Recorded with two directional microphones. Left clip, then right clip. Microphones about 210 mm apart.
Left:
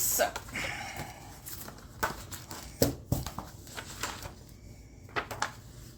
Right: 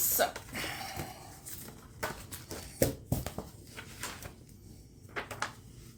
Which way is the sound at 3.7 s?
20° left (ahead or behind).